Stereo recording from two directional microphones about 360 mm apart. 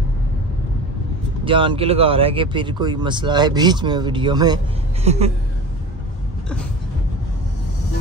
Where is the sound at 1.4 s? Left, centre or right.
Centre.